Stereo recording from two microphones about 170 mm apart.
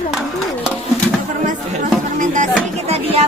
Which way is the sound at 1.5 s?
50° right (ahead or behind).